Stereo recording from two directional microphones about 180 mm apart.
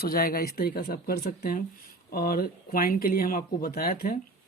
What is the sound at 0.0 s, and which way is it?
Speech, 55° left (ahead or behind).